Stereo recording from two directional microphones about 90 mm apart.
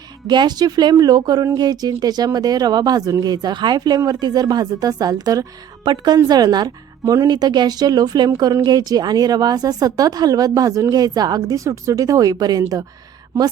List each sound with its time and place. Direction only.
0.3 s a woman's voice: 55° right (ahead or behind)
5.8 s a woman's voice: 55° right (ahead or behind)